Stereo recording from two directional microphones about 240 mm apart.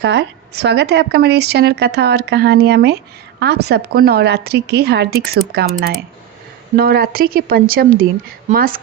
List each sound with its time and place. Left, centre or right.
0.0 s a woman's voice: right
6.7 s a woman's voice: right